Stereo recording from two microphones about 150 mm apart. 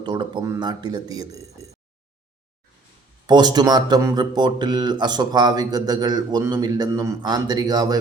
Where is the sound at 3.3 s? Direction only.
30° right (ahead or behind).